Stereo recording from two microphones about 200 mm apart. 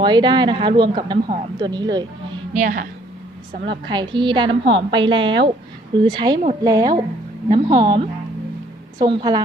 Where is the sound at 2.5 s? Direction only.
40° right (ahead or behind).